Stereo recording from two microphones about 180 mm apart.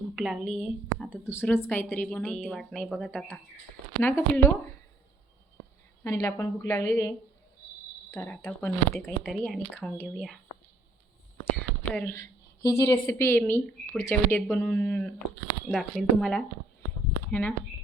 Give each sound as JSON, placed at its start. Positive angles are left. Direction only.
{"t": 0.2, "sound": "a woman's voice", "side_deg": 0}
{"t": 4.0, "sound": "a woman's voice", "side_deg": 15}
{"t": 6.0, "sound": "a woman's voice", "side_deg": 20}
{"t": 8.1, "sound": "speech", "side_deg": 5}
{"t": 11.8, "sound": "a woman's voice", "side_deg": 10}
{"t": 15.6, "sound": "speech", "side_deg": 0}